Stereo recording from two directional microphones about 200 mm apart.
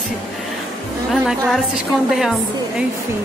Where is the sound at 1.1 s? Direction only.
Centre (ahead or behind).